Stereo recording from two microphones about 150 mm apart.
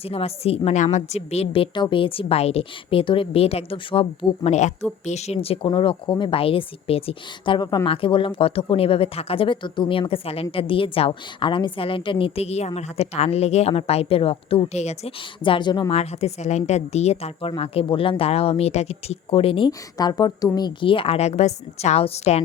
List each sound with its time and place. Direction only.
0.0 s speech: 40° left (ahead or behind)
4.5 s a woman's voice: 50° left (ahead or behind)
15.4 s speech: 35° left (ahead or behind)
15.9 s a woman's voice: 45° left (ahead or behind)